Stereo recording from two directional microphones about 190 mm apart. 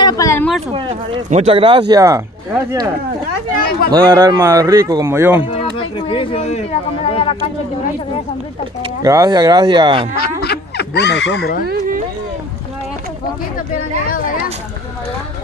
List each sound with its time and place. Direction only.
0.0 s a sound: 15° left (ahead or behind)
0.7 s a man's voice: 30° right (ahead or behind)
3.9 s a man's voice: 20° right (ahead or behind)
5.6 s speech: 30° left (ahead or behind)
9.0 s a man's voice: 15° right (ahead or behind)
10.1 s a sound: 55° left (ahead or behind)
11.6 s speech: 55° right (ahead or behind)